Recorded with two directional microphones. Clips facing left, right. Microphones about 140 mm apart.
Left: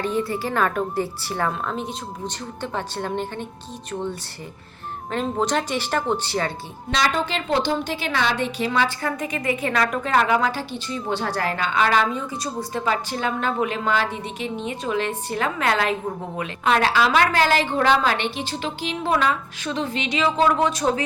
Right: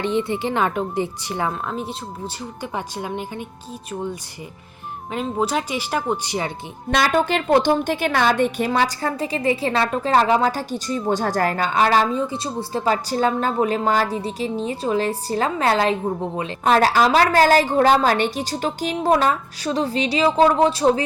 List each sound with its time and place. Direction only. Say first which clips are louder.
0.0 s a woman's voice: right 2 dB; 25° right (ahead or behind)
5.1 s a woman's voice: even; 5° right (ahead or behind)
6.9 s a woman's voice: right 4 dB; 50° right (ahead or behind); by 21.0 s 30° right (ahead or behind)